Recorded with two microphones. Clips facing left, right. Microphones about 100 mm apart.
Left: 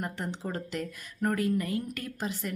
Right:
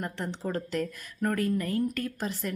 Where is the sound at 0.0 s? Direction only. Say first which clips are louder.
Right 1 dB; 15° left (ahead or behind).